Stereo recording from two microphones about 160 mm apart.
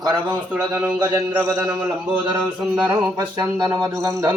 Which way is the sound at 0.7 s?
5° right (ahead or behind).